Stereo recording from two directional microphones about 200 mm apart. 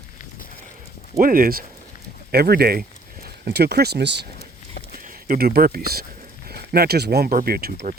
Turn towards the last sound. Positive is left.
turn(degrees=-50)  # may be behind; listen again after turning